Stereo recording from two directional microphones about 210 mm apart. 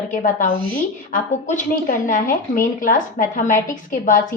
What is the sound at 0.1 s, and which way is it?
A woman's voice, 40° left (ahead or behind).